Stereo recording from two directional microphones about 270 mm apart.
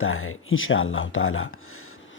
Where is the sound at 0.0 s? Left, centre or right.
Left.